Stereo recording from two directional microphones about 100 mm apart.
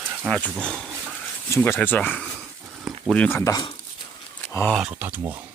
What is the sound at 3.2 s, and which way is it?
Speech, 25° left (ahead or behind).